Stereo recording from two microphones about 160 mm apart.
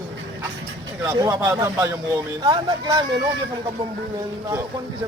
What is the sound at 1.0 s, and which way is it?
Speech, 20° right (ahead or behind).